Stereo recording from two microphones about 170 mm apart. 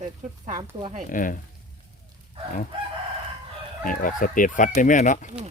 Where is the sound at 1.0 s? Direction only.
50° left (ahead or behind).